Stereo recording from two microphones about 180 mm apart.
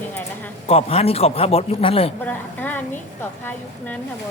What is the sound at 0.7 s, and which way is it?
A man's voice, 35° left (ahead or behind).